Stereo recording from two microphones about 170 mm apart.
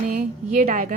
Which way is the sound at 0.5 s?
50° right (ahead or behind).